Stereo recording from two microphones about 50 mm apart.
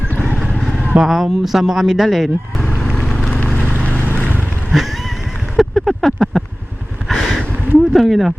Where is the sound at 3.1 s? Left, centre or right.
Centre.